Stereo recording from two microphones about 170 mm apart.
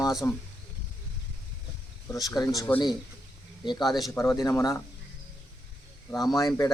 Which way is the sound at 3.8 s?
Centre (ahead or behind).